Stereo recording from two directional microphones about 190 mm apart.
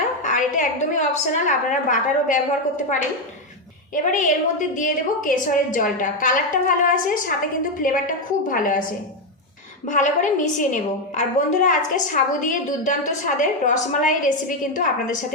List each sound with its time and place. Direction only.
0.2 s a woman's voice: 40° left (ahead or behind)
9.8 s a woman's voice: 40° left (ahead or behind)